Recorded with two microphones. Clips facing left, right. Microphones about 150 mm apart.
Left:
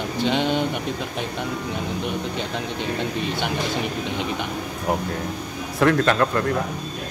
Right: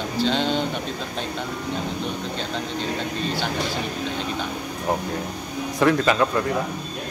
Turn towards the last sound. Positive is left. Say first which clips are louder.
# even
turn(degrees=-5)  # may be behind; listen again after turning